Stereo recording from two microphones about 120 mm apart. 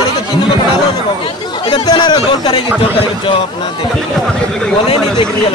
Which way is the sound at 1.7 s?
40° left (ahead or behind).